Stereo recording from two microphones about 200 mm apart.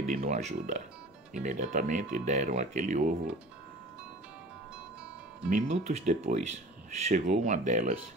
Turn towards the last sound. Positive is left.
turn(degrees=-40)  # may be behind; listen again after turning